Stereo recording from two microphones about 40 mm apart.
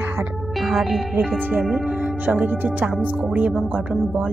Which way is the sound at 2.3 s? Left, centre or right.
Right.